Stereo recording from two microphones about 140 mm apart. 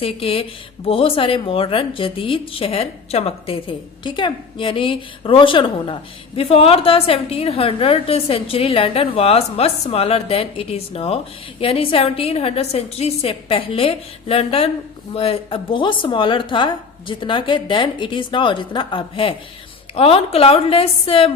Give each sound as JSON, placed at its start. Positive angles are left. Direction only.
{"t": 0.0, "sound": "a woman's voice", "side_deg": 40}